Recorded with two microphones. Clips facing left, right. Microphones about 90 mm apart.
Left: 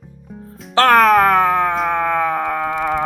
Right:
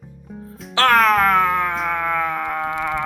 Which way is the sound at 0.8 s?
45° left (ahead or behind).